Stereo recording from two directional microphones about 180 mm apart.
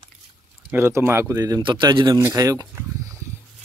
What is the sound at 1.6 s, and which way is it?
Speech, 25° right (ahead or behind).